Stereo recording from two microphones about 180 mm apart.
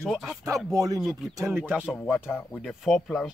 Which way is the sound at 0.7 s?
20° right (ahead or behind).